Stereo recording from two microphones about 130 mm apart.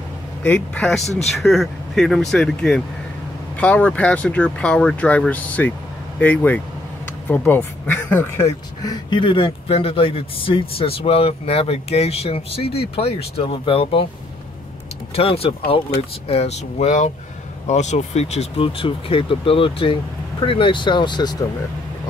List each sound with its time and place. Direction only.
0.4 s speech: 10° left (ahead or behind)
8.9 s speech: 40° left (ahead or behind)
15.1 s speech: 50° left (ahead or behind); by 21.5 s 35° left (ahead or behind)